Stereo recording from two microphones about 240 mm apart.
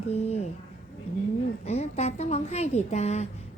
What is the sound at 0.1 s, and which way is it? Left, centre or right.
Speech, left.